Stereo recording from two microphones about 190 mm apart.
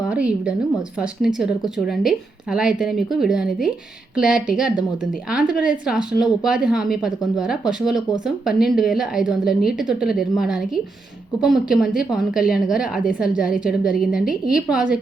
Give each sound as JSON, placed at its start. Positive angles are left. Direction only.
{"t": 0.1, "sound": "a woman's voice", "side_deg": -5}